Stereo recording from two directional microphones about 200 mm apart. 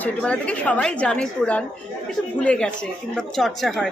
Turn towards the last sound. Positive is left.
turn(degrees=0)  # may be behind; listen again after turning